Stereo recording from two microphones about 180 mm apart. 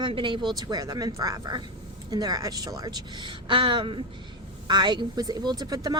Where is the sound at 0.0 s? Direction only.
25° right (ahead or behind).